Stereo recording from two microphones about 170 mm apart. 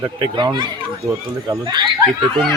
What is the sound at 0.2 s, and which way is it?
Speech, 25° right (ahead or behind).